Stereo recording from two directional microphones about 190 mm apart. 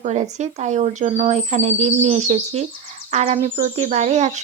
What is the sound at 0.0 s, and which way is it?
Speech, 35° right (ahead or behind).